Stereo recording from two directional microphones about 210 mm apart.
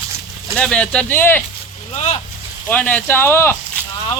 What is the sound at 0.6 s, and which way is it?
Speech, 5° left (ahead or behind).